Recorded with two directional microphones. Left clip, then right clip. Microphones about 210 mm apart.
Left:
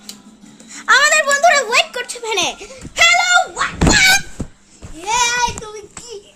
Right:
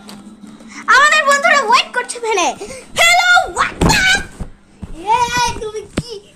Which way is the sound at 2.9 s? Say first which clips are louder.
Right 1 dB; 25° right (ahead or behind).